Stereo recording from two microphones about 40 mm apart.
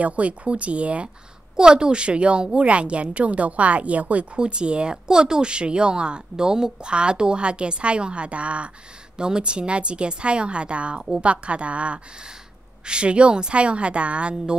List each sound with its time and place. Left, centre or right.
0.0 s a woman's voice: right
1.6 s a woman's voice: right
4.4 s a woman's voice: right